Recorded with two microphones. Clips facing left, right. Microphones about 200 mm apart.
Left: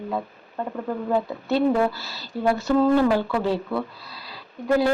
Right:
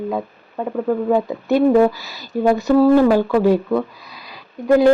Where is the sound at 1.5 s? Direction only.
15° right (ahead or behind).